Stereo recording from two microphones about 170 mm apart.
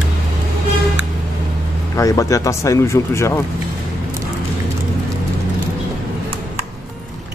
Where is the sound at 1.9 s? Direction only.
20° left (ahead or behind).